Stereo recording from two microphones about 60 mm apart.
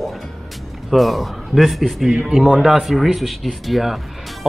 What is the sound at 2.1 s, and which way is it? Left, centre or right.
Speech, centre.